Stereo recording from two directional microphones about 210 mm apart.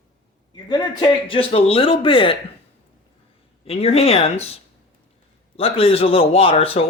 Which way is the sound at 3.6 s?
30° left (ahead or behind).